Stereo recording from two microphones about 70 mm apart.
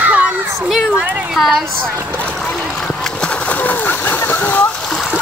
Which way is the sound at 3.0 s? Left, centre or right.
Centre.